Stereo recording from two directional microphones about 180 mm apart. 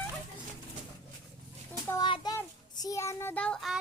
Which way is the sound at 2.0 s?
25° left (ahead or behind).